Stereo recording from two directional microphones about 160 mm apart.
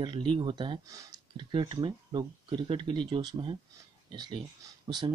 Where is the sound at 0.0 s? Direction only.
30° right (ahead or behind).